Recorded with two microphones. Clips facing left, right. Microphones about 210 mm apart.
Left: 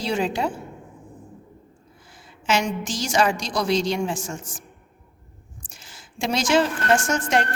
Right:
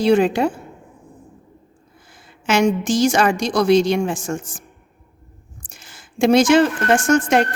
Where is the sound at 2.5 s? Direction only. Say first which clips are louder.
Right 7 dB; 50° right (ahead or behind).